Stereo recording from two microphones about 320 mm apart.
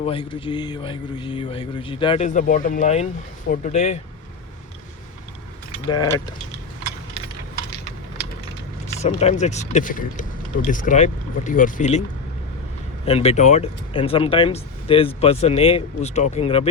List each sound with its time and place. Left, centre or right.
0.0 s speech: centre
5.9 s speech: centre
9.0 s speech: left
13.1 s speech: centre